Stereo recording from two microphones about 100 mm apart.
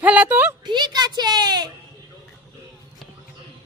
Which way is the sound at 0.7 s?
45° right (ahead or behind).